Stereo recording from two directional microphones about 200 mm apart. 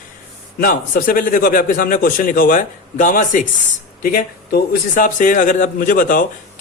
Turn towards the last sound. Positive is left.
turn(degrees=40)  # may be behind; listen again after turning